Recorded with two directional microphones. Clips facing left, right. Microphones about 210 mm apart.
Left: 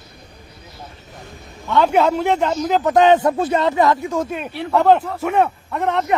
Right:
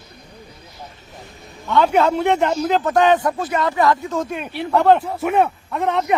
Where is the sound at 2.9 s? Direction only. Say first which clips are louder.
Left 4 dB; 20° left (ahead or behind).